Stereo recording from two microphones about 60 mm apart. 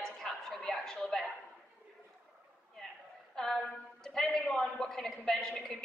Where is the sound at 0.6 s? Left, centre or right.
Centre.